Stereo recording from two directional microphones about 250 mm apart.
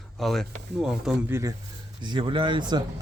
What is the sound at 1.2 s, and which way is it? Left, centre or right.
Speech, centre.